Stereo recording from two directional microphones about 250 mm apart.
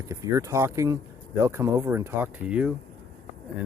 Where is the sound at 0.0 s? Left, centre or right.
Centre.